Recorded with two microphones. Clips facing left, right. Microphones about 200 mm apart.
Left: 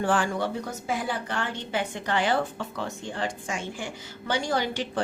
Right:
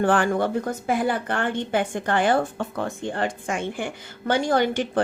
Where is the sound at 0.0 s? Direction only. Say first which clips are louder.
Right 5 dB; 60° right (ahead or behind).